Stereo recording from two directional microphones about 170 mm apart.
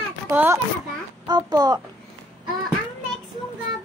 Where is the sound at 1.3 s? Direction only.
25° right (ahead or behind).